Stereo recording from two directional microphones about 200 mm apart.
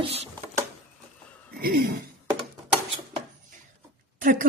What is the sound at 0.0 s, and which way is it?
Speech, 30° right (ahead or behind).